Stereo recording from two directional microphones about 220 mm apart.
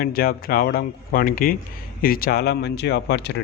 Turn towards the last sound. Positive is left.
turn(degrees=50)  # may be behind; listen again after turning